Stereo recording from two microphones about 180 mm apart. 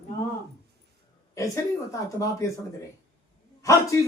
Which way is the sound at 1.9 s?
15° left (ahead or behind).